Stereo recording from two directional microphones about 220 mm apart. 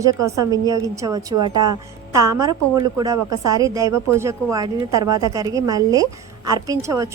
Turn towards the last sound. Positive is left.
turn(degrees=-15)  # may be behind; listen again after turning